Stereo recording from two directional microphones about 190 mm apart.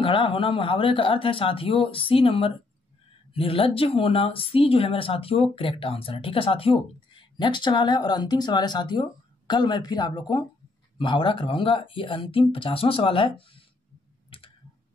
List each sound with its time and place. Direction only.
0.0 s speech: 25° left (ahead or behind)
14.3 s clicking: 30° left (ahead or behind)